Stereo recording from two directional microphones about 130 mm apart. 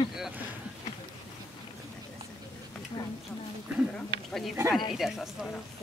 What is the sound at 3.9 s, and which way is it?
Speech, 5° left (ahead or behind).